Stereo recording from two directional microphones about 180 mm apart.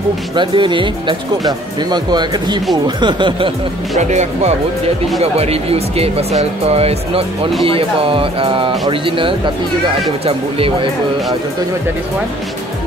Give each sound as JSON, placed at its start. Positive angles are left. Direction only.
{"t": 0.4, "sound": "speech", "side_deg": -25}
{"t": 4.0, "sound": "speech", "side_deg": -40}